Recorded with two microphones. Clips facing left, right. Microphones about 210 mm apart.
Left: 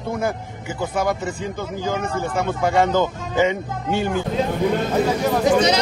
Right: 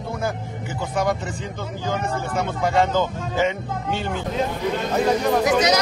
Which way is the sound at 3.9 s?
10° left (ahead or behind).